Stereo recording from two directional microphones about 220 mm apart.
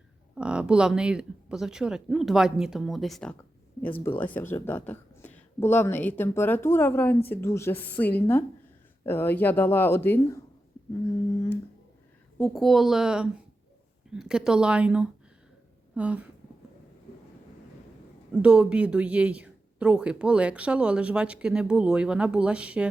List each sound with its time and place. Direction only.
0.3 s speech: 5° right (ahead or behind)
12.4 s speech: centre (ahead or behind)
18.4 s speech: 5° right (ahead or behind)